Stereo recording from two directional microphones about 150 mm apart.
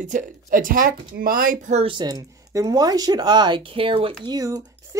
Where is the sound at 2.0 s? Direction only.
25° right (ahead or behind).